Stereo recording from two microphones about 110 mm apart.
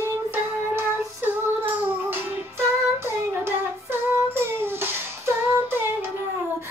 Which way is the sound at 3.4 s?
20° right (ahead or behind).